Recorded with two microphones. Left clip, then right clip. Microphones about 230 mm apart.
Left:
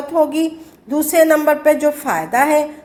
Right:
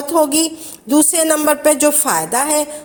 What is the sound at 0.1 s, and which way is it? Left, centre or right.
A woman's voice, right.